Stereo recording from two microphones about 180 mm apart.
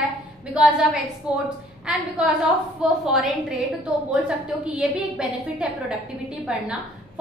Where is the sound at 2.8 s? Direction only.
Centre (ahead or behind).